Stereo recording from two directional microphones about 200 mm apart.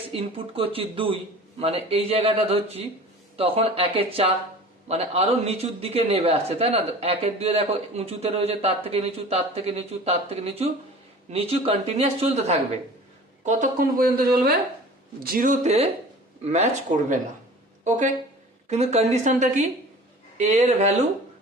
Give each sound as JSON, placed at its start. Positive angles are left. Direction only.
{"t": 0.1, "sound": "a man's voice", "side_deg": -25}
{"t": 18.7, "sound": "a man's voice", "side_deg": -35}